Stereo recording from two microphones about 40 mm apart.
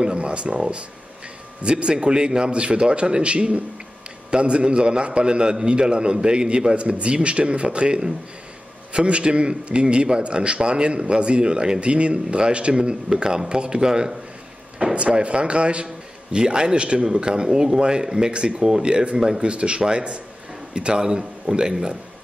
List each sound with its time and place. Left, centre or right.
0.0 s a sound: right
1.6 s a man's voice: right
15.0 s a man's voice: right
18.6 s a man's voice: centre